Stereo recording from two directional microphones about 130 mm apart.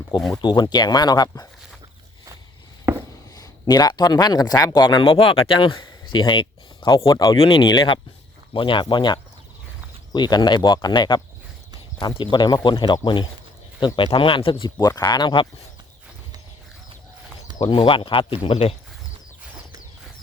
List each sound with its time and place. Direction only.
0.4 s speech: 35° left (ahead or behind)
2.9 s writing: 20° right (ahead or behind)
3.3 s speech: 30° left (ahead or behind)
7.3 s speech: 40° left (ahead or behind)
17.6 s speech: 40° left (ahead or behind)